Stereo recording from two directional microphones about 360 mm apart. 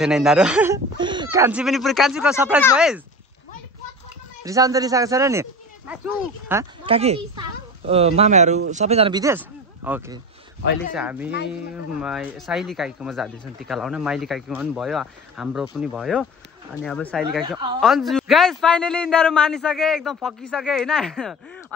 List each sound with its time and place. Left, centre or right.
0.0 s speech: centre
4.5 s speech: centre
10.6 s speech: left
11.0 s speech: centre